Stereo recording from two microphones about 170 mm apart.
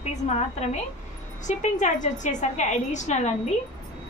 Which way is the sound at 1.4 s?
45° left (ahead or behind).